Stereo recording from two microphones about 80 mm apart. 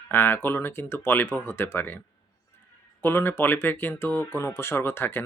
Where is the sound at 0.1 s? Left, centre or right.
Left.